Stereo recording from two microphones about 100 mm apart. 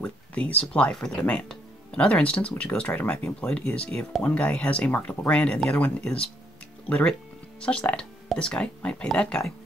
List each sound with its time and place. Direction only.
0.0 s speech: 15° left (ahead or behind)